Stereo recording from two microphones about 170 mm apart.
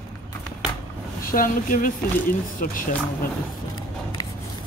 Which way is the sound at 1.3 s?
55° left (ahead or behind).